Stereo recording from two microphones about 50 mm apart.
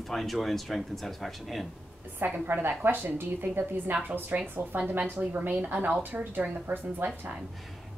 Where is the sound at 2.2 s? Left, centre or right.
Right.